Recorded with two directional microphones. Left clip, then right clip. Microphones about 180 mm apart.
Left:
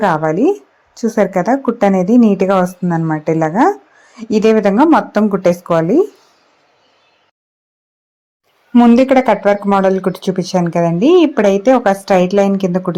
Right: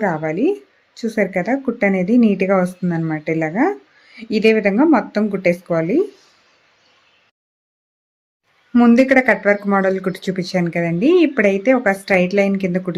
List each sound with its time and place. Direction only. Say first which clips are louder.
0.0 s speech: left 7 dB; centre (ahead or behind)
0.3 s speech: left 5 dB; 15° left (ahead or behind)
1.4 s speech: left 6 dB; centre (ahead or behind)
1.8 s speech: left 4 dB; 10° left (ahead or behind)
3.5 s speech: left 7 dB; centre (ahead or behind)
4.1 s speech: left 3 dB; 15° left (ahead or behind)
8.7 s speech: left 3 dB; 15° left (ahead or behind)